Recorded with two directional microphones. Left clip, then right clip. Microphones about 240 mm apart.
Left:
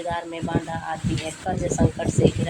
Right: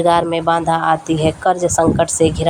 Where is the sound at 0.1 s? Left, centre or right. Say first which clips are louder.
Right 14 dB; right.